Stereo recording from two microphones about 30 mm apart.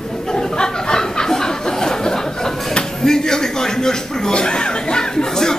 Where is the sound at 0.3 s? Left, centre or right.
Left.